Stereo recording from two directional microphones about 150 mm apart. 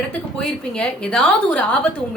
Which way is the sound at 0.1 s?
5° left (ahead or behind).